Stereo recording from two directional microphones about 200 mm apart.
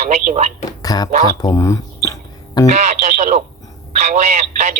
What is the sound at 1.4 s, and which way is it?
Speech, 15° left (ahead or behind).